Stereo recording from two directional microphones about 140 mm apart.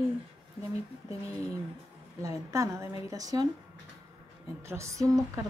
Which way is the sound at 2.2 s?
20° right (ahead or behind).